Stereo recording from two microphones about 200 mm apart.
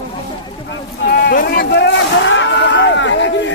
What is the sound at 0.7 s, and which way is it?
Vehicle, 55° left (ahead or behind).